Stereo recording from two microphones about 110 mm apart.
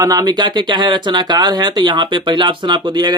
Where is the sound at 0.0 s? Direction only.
35° right (ahead or behind).